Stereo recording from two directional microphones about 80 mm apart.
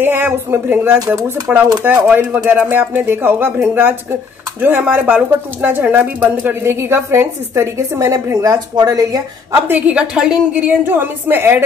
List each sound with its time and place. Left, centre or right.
0.0 s speech: right
0.8 s speech: right
1.5 s speech: centre; by 9.2 s right
9.5 s a woman's voice: right
10.5 s speech: right